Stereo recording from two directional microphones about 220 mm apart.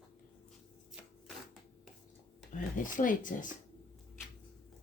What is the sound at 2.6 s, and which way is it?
Speech, 35° left (ahead or behind).